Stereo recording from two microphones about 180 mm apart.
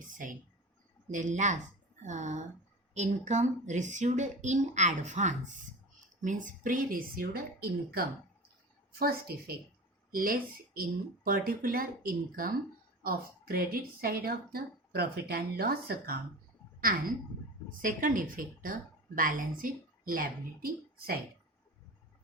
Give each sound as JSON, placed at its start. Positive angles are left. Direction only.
{"t": 0.0, "sound": "a sound", "side_deg": -45}
{"t": 1.1, "sound": "speech", "side_deg": -40}
{"t": 17.8, "sound": "speech", "side_deg": -50}